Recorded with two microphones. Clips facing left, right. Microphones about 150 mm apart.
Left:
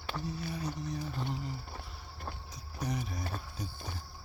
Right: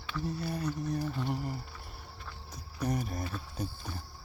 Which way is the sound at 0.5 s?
65° right (ahead or behind).